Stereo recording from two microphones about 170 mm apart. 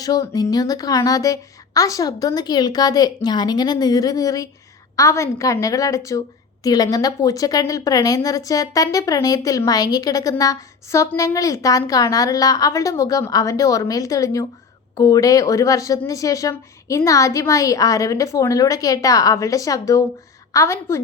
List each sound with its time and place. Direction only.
0.0 s a woman's voice: 20° left (ahead or behind)